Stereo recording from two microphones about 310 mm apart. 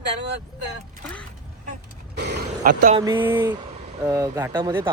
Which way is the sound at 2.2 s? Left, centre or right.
Right.